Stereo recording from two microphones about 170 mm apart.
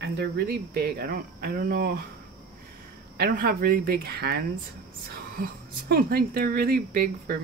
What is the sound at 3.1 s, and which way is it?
A woman's voice, 60° right (ahead or behind).